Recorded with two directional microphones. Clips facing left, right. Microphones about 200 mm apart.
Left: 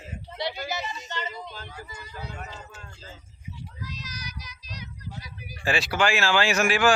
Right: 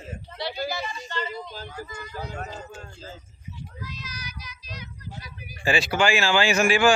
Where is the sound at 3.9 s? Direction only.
40° left (ahead or behind).